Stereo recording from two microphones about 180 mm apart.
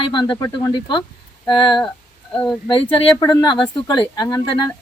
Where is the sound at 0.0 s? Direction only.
25° left (ahead or behind).